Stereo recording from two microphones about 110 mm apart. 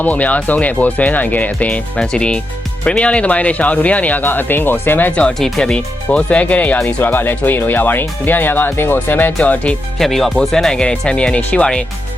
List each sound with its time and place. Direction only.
0.0 s speech: 15° left (ahead or behind)
10.0 s speech: centre (ahead or behind)